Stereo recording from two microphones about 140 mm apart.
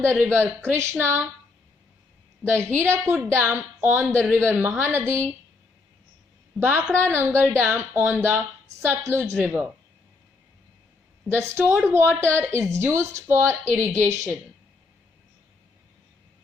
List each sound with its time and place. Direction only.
0.0 s a woman's voice: 15° right (ahead or behind)
2.5 s a woman's voice: 20° right (ahead or behind)
6.6 s a woman's voice: 15° right (ahead or behind)
11.3 s a woman's voice: 15° right (ahead or behind)